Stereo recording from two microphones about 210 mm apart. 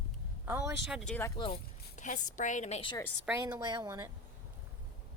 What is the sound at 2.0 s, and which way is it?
A woman's voice, 35° left (ahead or behind).